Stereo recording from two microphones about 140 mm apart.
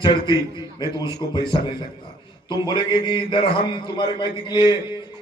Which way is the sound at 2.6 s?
35° left (ahead or behind).